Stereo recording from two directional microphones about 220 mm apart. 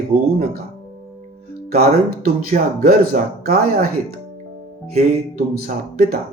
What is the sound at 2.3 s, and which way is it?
Speech, 40° right (ahead or behind).